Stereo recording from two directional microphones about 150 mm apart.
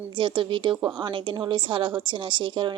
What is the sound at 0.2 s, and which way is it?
A woman's voice, 35° right (ahead or behind).